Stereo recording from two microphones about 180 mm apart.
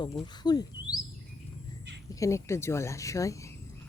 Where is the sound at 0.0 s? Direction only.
25° left (ahead or behind).